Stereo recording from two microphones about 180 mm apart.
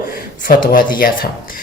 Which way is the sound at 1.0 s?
50° left (ahead or behind).